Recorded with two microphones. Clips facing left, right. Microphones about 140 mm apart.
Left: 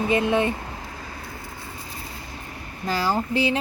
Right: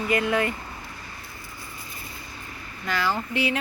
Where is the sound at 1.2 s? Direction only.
60° left (ahead or behind).